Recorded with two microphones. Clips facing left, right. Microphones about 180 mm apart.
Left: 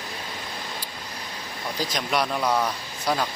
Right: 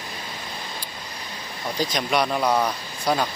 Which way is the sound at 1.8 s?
Centre (ahead or behind).